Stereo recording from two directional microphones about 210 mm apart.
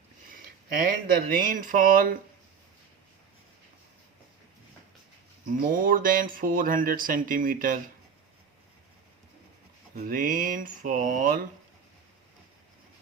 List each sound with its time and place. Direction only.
0.3 s speech: 40° right (ahead or behind)
5.6 s speech: 40° right (ahead or behind)
9.9 s speech: 45° right (ahead or behind)